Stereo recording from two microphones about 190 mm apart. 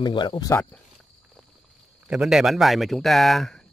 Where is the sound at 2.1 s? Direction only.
5° right (ahead or behind).